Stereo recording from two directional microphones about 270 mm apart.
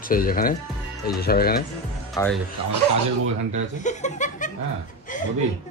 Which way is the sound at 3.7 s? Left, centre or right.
Left.